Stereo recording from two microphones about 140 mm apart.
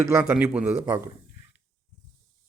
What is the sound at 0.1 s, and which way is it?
Speech, 15° right (ahead or behind).